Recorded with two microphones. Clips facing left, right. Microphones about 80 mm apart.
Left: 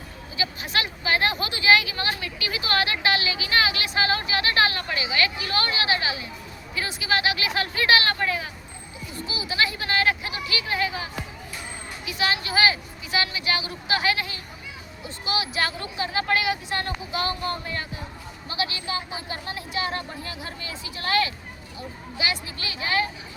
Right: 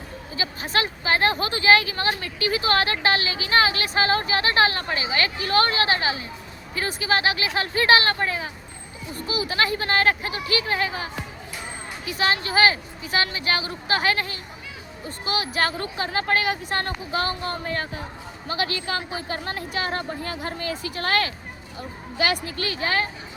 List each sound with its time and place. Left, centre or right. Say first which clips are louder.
0.3 s speech: right 2 dB; right
9.2 s a woman's voice: right 3 dB; right